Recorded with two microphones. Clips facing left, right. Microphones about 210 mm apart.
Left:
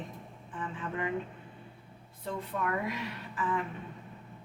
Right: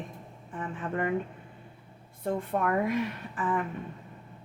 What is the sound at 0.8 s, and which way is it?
Speech, 50° right (ahead or behind).